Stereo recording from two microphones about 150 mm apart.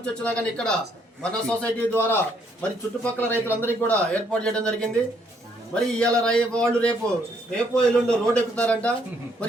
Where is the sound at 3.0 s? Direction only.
10° left (ahead or behind).